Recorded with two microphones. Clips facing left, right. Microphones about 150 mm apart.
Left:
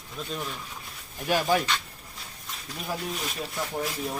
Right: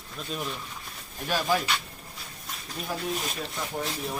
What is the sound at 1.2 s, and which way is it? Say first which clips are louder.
Speech: left 2 dB; 10° left (ahead or behind).